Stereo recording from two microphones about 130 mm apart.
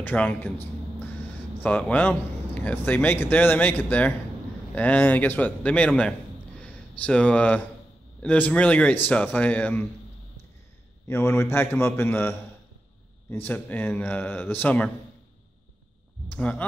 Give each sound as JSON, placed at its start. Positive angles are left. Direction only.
{"t": 0.0, "sound": "a man's voice", "side_deg": 10}
{"t": 11.1, "sound": "a man's voice", "side_deg": 20}
{"t": 16.3, "sound": "speech", "side_deg": 10}